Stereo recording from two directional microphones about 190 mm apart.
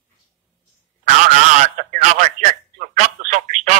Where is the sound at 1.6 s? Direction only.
40° right (ahead or behind).